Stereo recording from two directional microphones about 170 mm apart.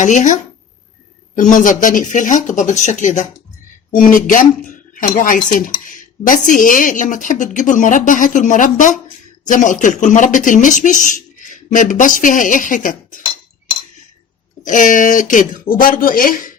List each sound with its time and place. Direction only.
0.0 s speech: 45° left (ahead or behind)
1.4 s speech: 50° left (ahead or behind)
14.6 s speech: 50° left (ahead or behind)